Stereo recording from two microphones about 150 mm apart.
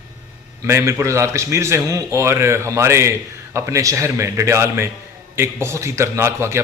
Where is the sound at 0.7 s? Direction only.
20° right (ahead or behind).